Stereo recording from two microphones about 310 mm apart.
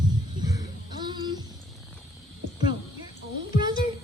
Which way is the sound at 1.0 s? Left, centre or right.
Centre.